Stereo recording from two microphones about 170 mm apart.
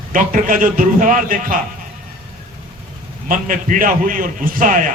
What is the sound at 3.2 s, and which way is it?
A man's voice, 55° right (ahead or behind).